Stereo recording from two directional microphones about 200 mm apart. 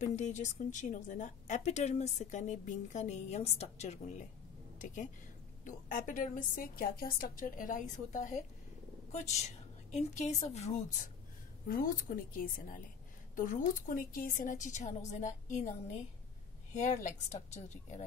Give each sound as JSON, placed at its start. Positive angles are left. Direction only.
{"t": 0.0, "sound": "speech", "side_deg": 35}
{"t": 11.6, "sound": "a woman's voice", "side_deg": 45}
{"t": 16.7, "sound": "speech", "side_deg": 35}